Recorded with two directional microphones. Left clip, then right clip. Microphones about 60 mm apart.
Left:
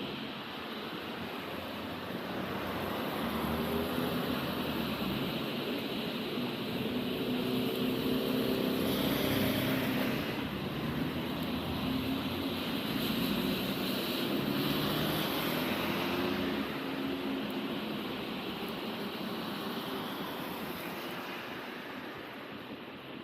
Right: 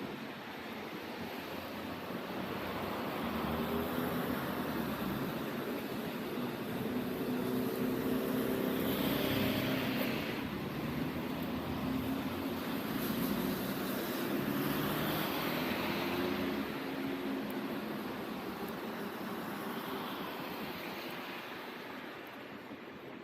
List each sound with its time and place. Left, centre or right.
3.3 s vehicle: centre
8.0 s vehicle: centre
8.9 s vehicle: left
13.2 s vehicle: centre